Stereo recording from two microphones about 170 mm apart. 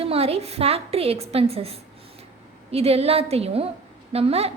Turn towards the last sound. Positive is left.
turn(degrees=-35)  # may be behind; listen again after turning